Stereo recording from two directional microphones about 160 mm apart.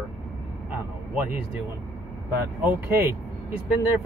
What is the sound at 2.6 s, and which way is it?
Speech, 20° right (ahead or behind).